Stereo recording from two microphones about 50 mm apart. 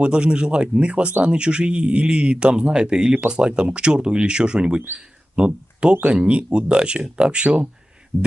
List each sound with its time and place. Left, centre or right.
0.0 s speech: right